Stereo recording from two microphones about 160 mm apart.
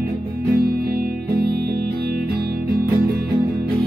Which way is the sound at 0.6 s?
70° right (ahead or behind).